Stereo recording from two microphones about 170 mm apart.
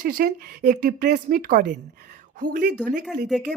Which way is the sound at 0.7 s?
50° right (ahead or behind).